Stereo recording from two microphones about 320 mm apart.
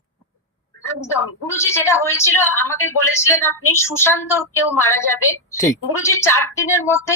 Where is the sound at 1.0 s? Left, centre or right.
Centre.